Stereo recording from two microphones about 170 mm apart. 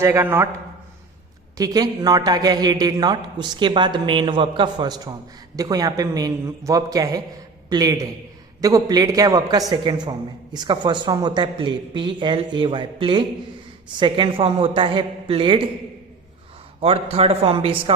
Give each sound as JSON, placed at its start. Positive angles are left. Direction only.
{"t": 0.0, "sound": "a man's voice", "side_deg": -15}
{"t": 1.5, "sound": "a man's voice", "side_deg": -20}
{"t": 16.8, "sound": "a woman's voice", "side_deg": -35}